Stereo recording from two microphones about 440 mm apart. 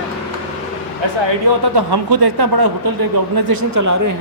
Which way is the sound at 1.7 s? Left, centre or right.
Right.